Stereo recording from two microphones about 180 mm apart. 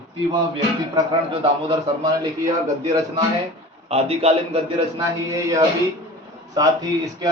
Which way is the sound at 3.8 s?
35° right (ahead or behind).